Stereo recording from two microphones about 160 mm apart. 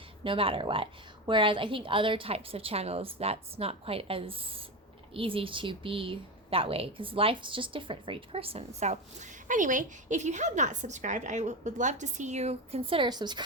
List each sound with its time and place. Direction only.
0.3 s speech: 35° right (ahead or behind)